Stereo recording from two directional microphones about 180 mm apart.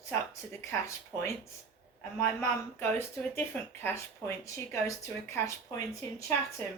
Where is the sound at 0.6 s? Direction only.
15° left (ahead or behind).